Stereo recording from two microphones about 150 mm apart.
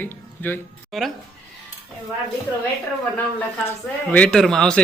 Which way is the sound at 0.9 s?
Centre (ahead or behind).